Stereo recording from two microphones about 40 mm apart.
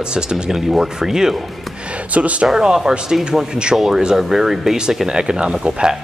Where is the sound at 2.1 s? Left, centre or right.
Right.